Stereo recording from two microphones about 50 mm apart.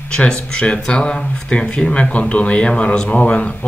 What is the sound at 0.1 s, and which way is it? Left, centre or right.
Speech, centre.